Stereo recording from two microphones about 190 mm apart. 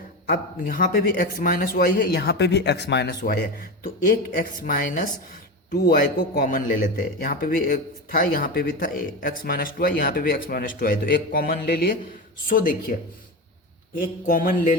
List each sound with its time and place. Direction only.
0.3 s a man's voice: 50° left (ahead or behind)
13.9 s a man's voice: 50° left (ahead or behind)